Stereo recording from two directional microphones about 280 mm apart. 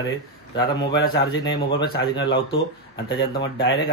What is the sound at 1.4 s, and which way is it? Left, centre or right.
Speech, left.